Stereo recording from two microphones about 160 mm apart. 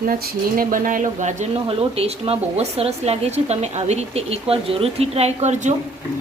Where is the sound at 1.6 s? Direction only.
40° right (ahead or behind).